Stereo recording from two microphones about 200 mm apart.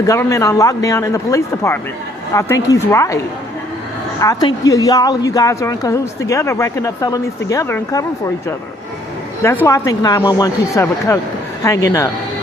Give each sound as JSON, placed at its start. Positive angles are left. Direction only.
{"t": 0.0, "sound": "speech", "side_deg": 15}
{"t": 4.2, "sound": "speech", "side_deg": 20}
{"t": 9.4, "sound": "speech", "side_deg": 15}